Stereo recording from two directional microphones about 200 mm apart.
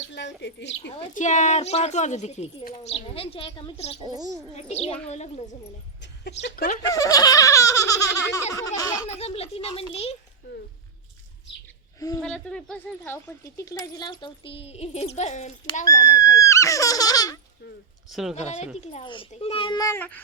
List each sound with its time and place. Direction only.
0.1 s a woman's voice: 60° left (ahead or behind)
1.1 s speech: 35° left (ahead or behind)
4.0 s a child's voice: 20° right (ahead or behind)
4.5 s speech: 30° left (ahead or behind)
6.0 s speech: 60° left (ahead or behind)
6.9 s belly laugh: 15° left (ahead or behind)
9.0 s speech: 30° left (ahead or behind)
11.9 s a woman's voice: 20° left (ahead or behind)
12.2 s speech: 5° left (ahead or behind); by 15.5 s 35° left (ahead or behind)
15.8 s belly laugh: 15° left (ahead or behind)
18.1 s speech: centre (ahead or behind)
18.3 s speech: 35° left (ahead or behind); by 20.2 s 10° left (ahead or behind)